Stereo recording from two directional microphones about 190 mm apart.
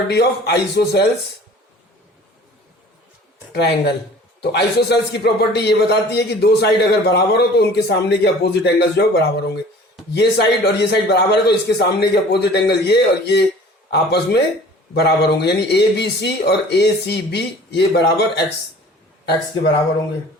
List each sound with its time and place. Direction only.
0.1 s a man's voice: 60° left (ahead or behind)
3.5 s a man's voice: 60° left (ahead or behind)